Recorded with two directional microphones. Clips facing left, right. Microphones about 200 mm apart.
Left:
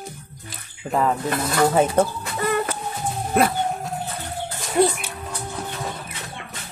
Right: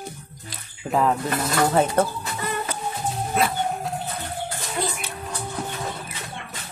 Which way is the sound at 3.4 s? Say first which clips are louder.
Left 4 dB; 55° left (ahead or behind).